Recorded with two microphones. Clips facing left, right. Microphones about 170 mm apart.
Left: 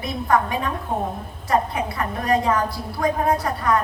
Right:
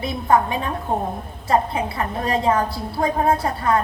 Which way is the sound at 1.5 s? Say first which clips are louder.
Right 2 dB; 30° right (ahead or behind).